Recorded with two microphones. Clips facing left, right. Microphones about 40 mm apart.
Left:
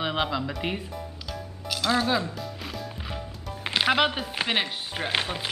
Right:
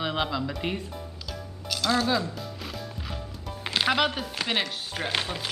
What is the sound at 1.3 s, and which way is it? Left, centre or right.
Music, centre.